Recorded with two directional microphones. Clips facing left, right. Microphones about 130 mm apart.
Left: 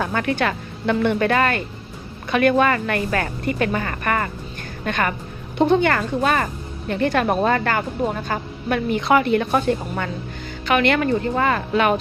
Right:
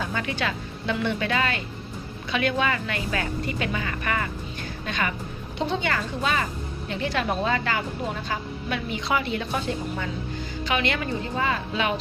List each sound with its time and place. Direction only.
0.0 s a woman's voice: 55° left (ahead or behind)